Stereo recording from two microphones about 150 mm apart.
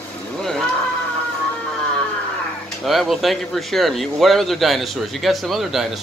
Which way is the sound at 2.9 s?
Centre (ahead or behind).